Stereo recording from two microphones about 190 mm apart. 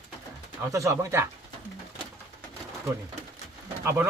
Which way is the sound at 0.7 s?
15° right (ahead or behind).